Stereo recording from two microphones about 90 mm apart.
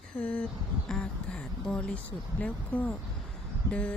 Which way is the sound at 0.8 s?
5° left (ahead or behind).